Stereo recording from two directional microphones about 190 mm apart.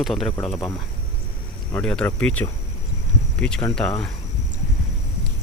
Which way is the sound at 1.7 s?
5° left (ahead or behind).